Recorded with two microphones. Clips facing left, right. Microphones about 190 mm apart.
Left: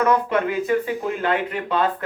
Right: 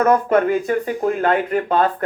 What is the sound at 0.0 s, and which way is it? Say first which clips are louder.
Speech: right 4 dB; 50° right (ahead or behind).